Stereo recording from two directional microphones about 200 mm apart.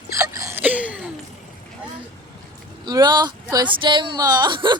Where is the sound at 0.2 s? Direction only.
15° right (ahead or behind).